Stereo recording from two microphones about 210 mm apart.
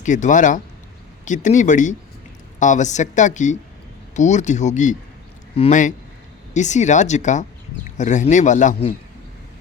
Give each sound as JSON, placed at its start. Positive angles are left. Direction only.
{"t": 0.0, "sound": "speech", "side_deg": 35}